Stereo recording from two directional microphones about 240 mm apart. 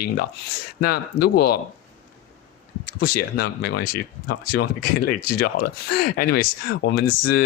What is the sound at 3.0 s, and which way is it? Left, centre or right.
Speech, left.